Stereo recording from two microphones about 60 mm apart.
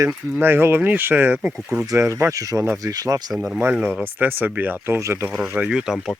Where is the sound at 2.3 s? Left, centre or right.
Right.